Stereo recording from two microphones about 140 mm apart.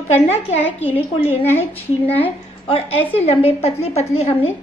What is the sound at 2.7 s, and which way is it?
A woman's voice, 45° left (ahead or behind).